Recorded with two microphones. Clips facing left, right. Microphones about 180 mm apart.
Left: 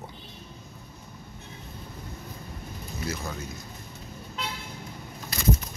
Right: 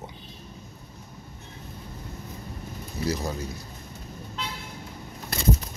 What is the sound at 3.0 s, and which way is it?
Speech, 35° right (ahead or behind).